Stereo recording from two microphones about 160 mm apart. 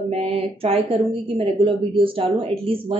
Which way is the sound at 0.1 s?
40° right (ahead or behind).